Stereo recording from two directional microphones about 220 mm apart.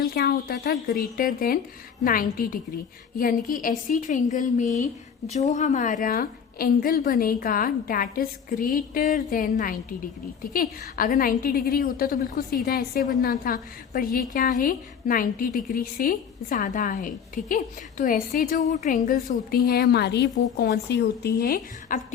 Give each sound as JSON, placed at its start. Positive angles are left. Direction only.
{"t": 0.0, "sound": "a woman's voice", "side_deg": 45}